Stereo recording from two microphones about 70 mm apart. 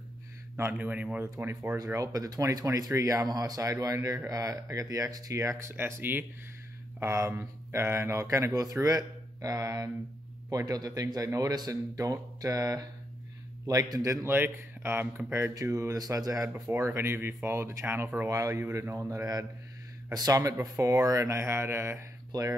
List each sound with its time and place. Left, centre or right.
0.7 s speech: right
1.4 s speech: right
1.8 s speech: right
3.3 s speech: right
7.0 s speech: right
14.2 s speech: right
15.5 s speech: right
16.7 s speech: right
18.3 s speech: right
22.3 s speech: right